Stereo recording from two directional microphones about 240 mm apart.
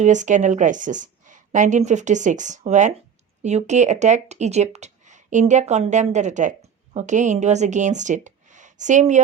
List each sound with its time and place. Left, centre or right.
0.0 s speech: right